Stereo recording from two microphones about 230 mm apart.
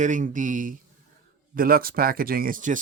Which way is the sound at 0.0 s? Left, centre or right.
Right.